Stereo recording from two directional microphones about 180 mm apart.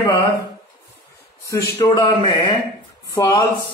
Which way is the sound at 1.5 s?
20° left (ahead or behind).